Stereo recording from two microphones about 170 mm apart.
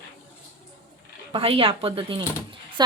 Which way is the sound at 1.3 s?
35° right (ahead or behind).